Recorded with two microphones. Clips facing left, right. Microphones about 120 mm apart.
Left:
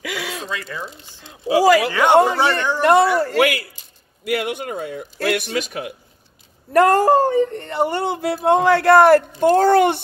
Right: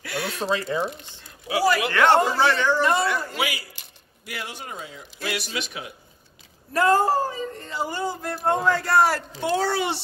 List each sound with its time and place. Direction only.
0.0 s a sound: 90° left
0.4 s speech: 30° right (ahead or behind)
1.9 s a man's voice: 10° left (ahead or behind)
2.1 s speech: 60° left (ahead or behind)
6.7 s speech: 65° left (ahead or behind)